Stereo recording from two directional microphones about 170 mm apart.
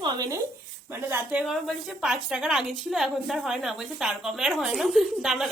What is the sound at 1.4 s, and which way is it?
A woman's voice, centre (ahead or behind).